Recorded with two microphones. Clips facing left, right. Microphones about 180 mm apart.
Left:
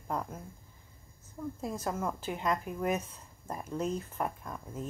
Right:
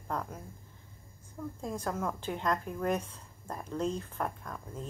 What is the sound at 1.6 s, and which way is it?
Speech, 5° left (ahead or behind).